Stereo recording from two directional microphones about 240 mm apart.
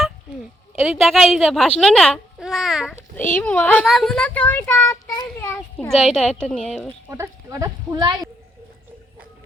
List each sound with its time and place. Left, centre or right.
0.8 s a child's voice: centre
7.1 s speech: centre